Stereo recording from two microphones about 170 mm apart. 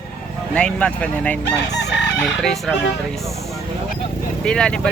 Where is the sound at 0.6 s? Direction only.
5° left (ahead or behind).